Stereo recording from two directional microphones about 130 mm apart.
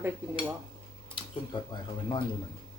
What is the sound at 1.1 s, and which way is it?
Speech, 40° left (ahead or behind).